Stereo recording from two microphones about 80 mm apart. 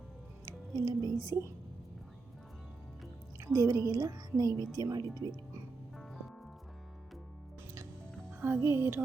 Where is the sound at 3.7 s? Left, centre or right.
Right.